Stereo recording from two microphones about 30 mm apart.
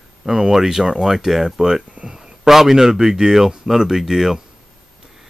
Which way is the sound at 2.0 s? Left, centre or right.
Centre.